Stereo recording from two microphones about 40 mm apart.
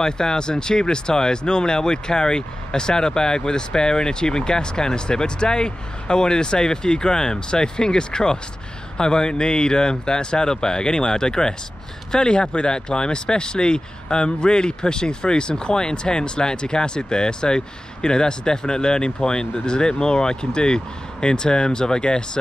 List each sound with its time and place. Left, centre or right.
0.0 s speech: centre